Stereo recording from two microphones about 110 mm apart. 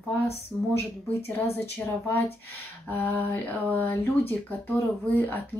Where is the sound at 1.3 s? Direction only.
20° left (ahead or behind).